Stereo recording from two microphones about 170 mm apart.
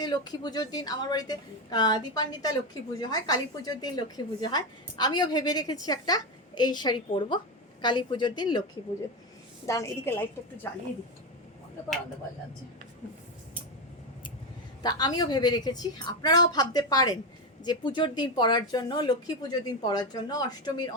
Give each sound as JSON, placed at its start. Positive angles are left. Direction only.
{"t": 0.0, "sound": "a woman's voice", "side_deg": 25}
{"t": 9.6, "sound": "a woman's voice", "side_deg": 15}
{"t": 14.8, "sound": "a woman's voice", "side_deg": 25}